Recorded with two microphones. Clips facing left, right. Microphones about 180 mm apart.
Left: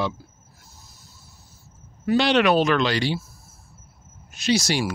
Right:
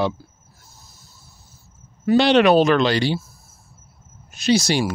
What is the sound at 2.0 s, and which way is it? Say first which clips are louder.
Speech: right 4 dB; 30° right (ahead or behind).